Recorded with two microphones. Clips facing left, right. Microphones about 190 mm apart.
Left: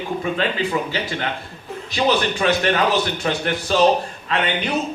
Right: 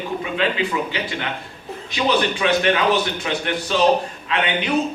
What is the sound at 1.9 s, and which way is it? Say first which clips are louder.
A man's voice: left 1 dB; 40° left (ahead or behind).